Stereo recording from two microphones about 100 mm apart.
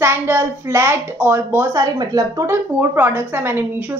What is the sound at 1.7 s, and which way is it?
Speech, 35° right (ahead or behind).